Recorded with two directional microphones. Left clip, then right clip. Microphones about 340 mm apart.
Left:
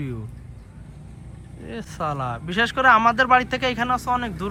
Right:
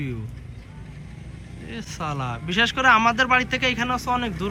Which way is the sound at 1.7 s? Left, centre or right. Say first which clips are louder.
Left 3 dB; centre.